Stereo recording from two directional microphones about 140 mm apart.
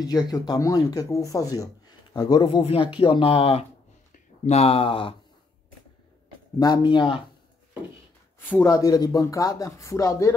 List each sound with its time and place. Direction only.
0.3 s speech: 25° left (ahead or behind)
6.6 s speech: 30° left (ahead or behind)
8.6 s speech: 25° left (ahead or behind)